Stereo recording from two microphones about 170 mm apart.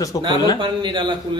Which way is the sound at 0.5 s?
30° right (ahead or behind).